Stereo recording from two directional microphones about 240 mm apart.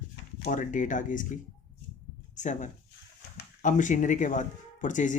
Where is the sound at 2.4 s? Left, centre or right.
Left.